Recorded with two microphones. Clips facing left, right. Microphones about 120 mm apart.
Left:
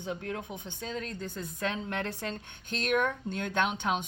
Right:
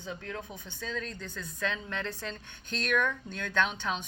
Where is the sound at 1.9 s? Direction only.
60° left (ahead or behind).